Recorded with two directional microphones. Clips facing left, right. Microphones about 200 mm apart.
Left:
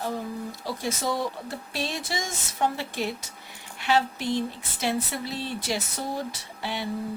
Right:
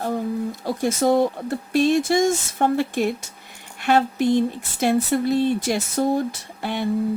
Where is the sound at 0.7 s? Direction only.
50° right (ahead or behind).